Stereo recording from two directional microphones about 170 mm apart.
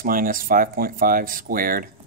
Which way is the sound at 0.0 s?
55° right (ahead or behind).